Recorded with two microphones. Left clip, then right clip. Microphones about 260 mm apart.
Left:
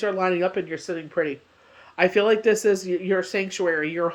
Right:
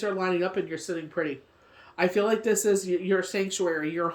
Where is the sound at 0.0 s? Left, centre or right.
Centre.